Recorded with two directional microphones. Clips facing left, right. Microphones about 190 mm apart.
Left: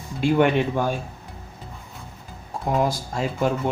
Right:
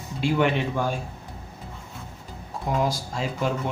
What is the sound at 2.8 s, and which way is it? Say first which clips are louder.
Speech: left 2 dB; 55° left (ahead or behind).